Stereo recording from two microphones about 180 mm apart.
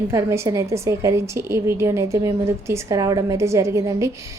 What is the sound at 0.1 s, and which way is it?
A woman's voice, 15° right (ahead or behind).